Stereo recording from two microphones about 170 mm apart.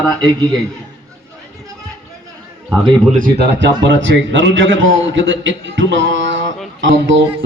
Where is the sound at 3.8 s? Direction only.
90° right.